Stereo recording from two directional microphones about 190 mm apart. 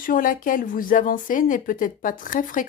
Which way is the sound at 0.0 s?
45° left (ahead or behind).